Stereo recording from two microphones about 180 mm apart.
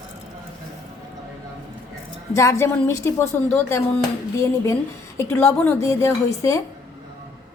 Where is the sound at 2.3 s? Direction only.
15° left (ahead or behind).